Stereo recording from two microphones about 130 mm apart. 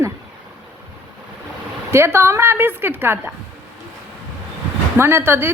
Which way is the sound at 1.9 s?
20° right (ahead or behind).